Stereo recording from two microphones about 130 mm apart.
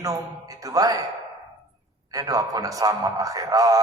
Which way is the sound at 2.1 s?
30° right (ahead or behind).